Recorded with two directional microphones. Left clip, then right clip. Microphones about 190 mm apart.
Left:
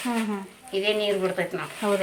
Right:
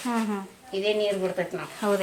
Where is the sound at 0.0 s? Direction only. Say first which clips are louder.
Even; centre (ahead or behind).